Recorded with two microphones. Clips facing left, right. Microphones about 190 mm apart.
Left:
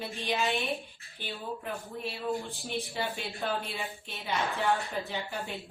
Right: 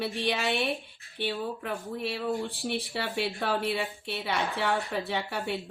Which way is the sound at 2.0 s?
75° right (ahead or behind).